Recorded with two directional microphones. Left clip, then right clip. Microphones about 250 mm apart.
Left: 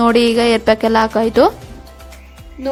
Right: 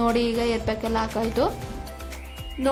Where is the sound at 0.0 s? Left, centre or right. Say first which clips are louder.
Left 10 dB; left.